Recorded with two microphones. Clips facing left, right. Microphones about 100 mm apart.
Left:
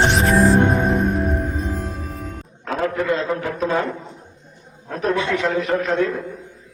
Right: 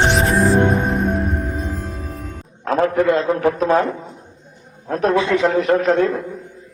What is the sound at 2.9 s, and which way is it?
Speech, 20° right (ahead or behind).